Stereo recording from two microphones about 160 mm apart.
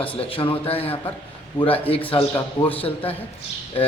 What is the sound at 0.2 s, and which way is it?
Speech, 35° left (ahead or behind).